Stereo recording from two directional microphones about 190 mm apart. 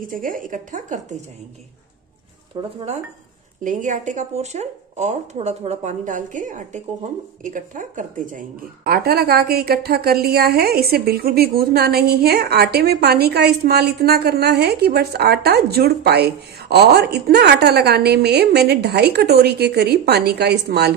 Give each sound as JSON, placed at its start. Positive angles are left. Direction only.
{"t": 0.0, "sound": "speech", "side_deg": -45}
{"t": 2.6, "sound": "speech", "side_deg": -30}
{"t": 3.6, "sound": "speech", "side_deg": -40}